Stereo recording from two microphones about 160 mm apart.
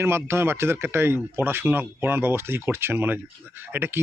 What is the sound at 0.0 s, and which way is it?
Speech, 15° right (ahead or behind).